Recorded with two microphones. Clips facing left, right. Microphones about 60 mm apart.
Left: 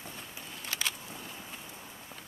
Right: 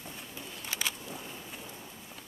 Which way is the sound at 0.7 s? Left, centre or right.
Centre.